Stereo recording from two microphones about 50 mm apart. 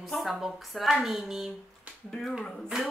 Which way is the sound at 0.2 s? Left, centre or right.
Centre.